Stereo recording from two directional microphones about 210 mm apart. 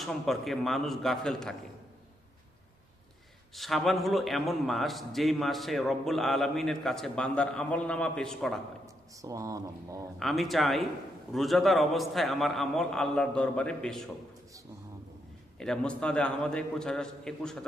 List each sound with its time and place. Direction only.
0.0 s a man's voice: centre (ahead or behind)
3.5 s a man's voice: centre (ahead or behind)
9.2 s speech: 15° right (ahead or behind)
10.2 s a man's voice: centre (ahead or behind)
15.5 s a man's voice: 5° left (ahead or behind)